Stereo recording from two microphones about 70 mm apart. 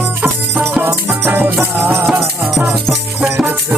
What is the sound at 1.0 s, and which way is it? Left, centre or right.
Music, right.